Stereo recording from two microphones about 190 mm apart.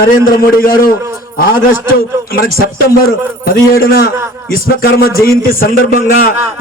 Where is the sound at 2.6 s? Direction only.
50° left (ahead or behind).